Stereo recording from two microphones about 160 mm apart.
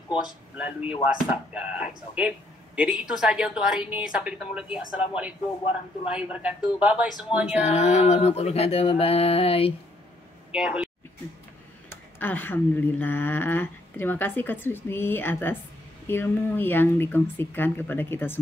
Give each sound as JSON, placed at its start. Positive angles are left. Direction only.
{"t": 0.2, "sound": "a man's voice", "side_deg": -5}
{"t": 7.5, "sound": "mantra", "side_deg": 45}
{"t": 10.5, "sound": "speech", "side_deg": -5}
{"t": 11.9, "sound": "speech", "side_deg": 10}